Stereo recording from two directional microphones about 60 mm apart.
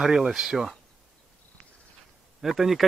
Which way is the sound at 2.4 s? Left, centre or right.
Centre.